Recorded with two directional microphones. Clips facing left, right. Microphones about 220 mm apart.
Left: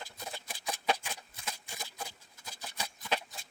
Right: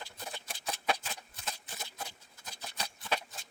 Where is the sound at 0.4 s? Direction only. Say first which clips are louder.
Left 1 dB; 10° left (ahead or behind).